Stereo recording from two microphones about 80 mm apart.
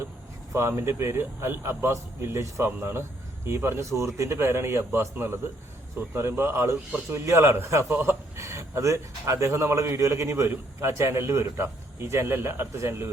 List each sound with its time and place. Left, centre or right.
0.5 s speech: right